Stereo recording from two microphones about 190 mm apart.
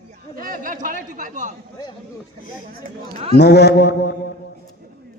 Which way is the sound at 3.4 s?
60° left (ahead or behind).